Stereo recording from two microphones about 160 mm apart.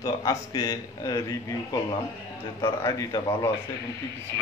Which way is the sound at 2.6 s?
25° left (ahead or behind).